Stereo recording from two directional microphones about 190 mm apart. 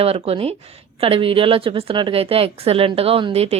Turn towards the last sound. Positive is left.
turn(degrees=-30)  # may be behind; listen again after turning